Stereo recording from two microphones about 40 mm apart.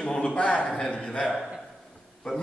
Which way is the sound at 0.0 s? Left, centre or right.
Left.